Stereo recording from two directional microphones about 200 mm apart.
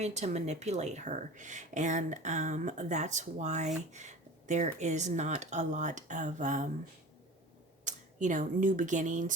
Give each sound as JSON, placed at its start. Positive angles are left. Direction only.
{"t": 0.0, "sound": "speech", "side_deg": -35}
{"t": 7.9, "sound": "speech", "side_deg": -40}